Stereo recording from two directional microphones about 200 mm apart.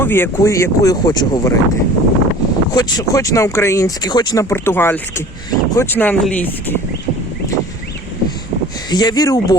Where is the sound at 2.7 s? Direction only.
15° left (ahead or behind).